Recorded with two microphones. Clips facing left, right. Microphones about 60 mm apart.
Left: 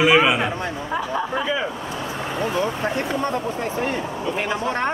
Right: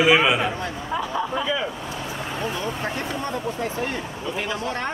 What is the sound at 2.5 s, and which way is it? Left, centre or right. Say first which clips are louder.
Speech: left 5 dB; left.